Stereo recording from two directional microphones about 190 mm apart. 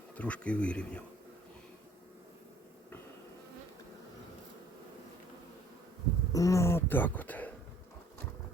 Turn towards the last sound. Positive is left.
turn(degrees=10)  # may be behind; listen again after turning